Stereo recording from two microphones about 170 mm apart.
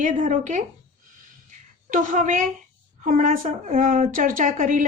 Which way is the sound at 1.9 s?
50° right (ahead or behind).